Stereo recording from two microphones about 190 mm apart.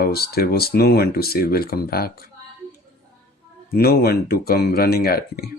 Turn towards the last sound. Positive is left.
turn(degrees=55)  # may be behind; listen again after turning